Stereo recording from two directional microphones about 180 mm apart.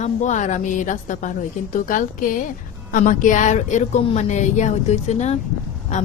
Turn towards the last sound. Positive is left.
turn(degrees=40)  # may be behind; listen again after turning